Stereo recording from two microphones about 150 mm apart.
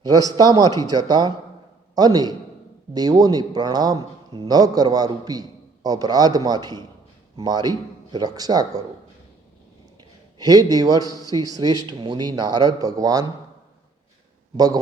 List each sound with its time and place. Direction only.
0.0 s a man's voice: 25° right (ahead or behind)
10.3 s a man's voice: 25° right (ahead or behind)
14.5 s a man's voice: 25° right (ahead or behind)